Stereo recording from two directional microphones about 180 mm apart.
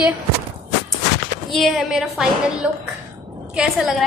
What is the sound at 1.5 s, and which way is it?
A woman's voice, centre (ahead or behind).